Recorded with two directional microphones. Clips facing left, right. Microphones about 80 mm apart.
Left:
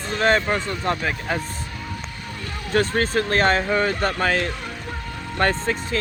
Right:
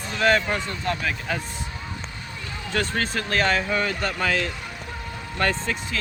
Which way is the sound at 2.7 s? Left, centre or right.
Left.